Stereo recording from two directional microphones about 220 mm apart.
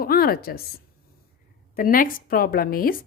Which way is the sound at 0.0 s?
45° left (ahead or behind).